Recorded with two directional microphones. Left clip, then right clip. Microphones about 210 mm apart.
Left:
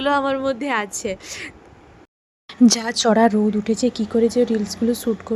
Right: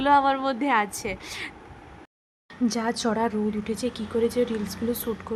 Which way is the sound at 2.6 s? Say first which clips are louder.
Left 9 dB; 35° left (ahead or behind).